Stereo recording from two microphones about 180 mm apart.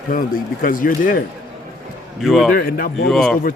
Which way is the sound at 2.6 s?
55° left (ahead or behind).